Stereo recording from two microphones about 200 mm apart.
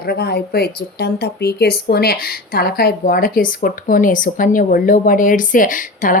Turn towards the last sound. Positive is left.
turn(degrees=40)  # may be behind; listen again after turning